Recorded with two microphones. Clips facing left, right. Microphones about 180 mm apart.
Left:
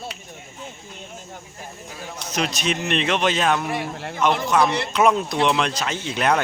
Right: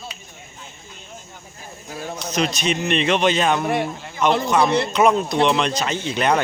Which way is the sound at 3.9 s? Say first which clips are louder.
Left 5 dB; 75° left (ahead or behind).